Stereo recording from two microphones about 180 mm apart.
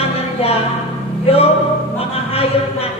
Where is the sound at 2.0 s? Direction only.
35° left (ahead or behind).